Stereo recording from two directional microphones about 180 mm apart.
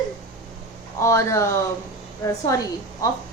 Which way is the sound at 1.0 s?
15° left (ahead or behind).